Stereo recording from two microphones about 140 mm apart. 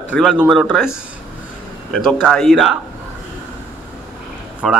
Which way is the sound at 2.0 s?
Centre (ahead or behind).